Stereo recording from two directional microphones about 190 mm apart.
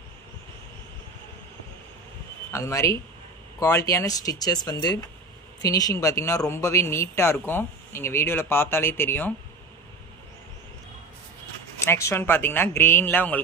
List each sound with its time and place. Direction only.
2.5 s speech: 15° left (ahead or behind)
11.8 s speech: 15° left (ahead or behind)